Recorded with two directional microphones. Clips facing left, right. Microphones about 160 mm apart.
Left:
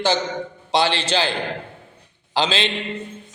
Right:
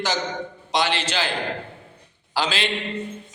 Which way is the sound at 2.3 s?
25° left (ahead or behind).